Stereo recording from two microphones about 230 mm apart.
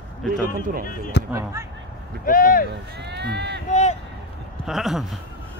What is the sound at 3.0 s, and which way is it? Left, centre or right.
Speech, right.